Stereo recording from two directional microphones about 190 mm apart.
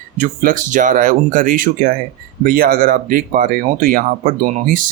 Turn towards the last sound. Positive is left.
turn(degrees=-45)  # may be behind; listen again after turning